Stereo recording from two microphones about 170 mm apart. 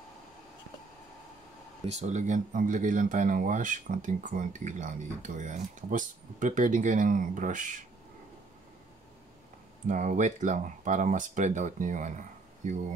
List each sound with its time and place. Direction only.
1.9 s speech: 45° right (ahead or behind)
9.8 s speech: 45° right (ahead or behind)